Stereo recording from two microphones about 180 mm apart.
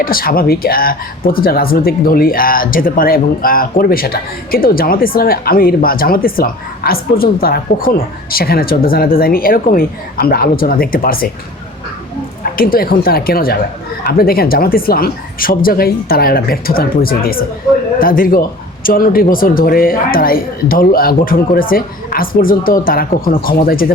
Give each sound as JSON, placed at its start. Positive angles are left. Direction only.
{"t": 0.0, "sound": "speech", "side_deg": 55}
{"t": 12.5, "sound": "a man's voice", "side_deg": 55}